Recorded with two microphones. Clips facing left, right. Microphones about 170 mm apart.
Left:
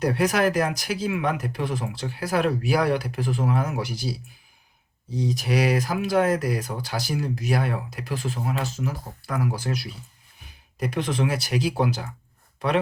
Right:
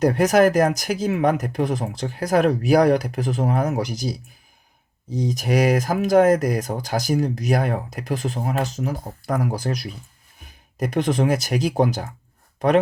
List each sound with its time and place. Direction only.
0.0 s speech: 45° right (ahead or behind)